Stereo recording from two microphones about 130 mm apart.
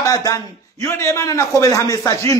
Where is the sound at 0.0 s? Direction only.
25° left (ahead or behind).